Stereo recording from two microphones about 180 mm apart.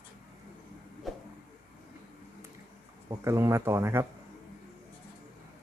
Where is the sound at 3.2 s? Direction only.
15° right (ahead or behind).